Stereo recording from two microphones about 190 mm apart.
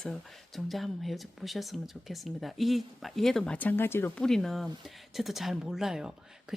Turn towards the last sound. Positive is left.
turn(degrees=-5)  # may be behind; listen again after turning